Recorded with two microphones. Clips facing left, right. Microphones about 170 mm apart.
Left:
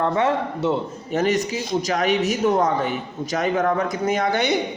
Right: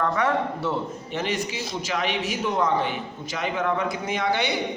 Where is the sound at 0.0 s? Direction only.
25° left (ahead or behind).